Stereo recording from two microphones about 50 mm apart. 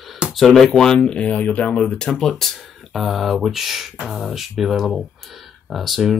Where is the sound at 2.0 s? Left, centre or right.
Centre.